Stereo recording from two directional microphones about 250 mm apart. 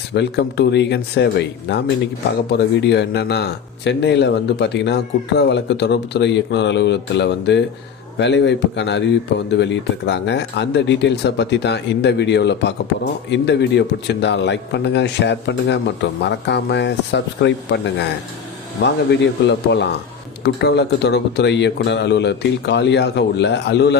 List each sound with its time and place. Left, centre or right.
0.1 s speech: left
18.8 s speech: left